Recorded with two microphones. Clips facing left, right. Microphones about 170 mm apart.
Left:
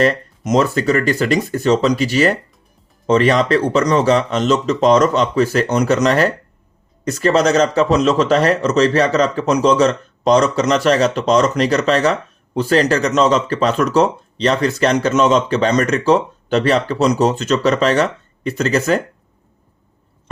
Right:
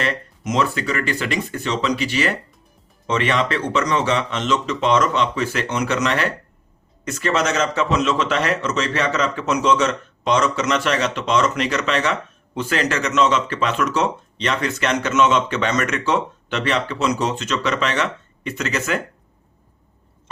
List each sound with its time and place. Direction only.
0.0 s speech: 40° left (ahead or behind)